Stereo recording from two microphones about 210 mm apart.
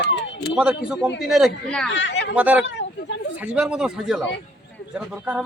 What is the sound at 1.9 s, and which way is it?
Speech, 60° left (ahead or behind).